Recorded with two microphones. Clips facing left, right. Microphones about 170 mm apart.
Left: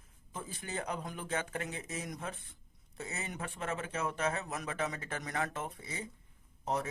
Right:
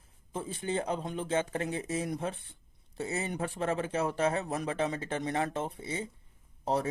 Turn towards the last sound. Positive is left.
turn(degrees=-30)  # may be behind; listen again after turning